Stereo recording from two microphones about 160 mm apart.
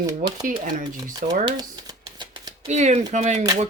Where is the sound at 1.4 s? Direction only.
25° right (ahead or behind).